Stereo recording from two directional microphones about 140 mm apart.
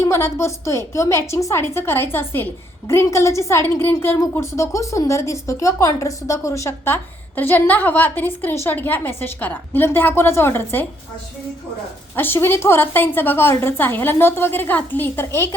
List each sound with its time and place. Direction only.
0.0 s a woman's voice: 20° left (ahead or behind)
12.1 s a woman's voice: 15° left (ahead or behind)